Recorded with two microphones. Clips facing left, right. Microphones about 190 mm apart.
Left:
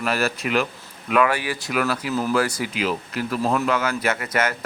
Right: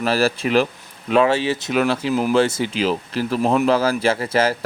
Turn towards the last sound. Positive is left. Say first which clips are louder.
# right 5 dB
turn(degrees=-30)  # may be behind; listen again after turning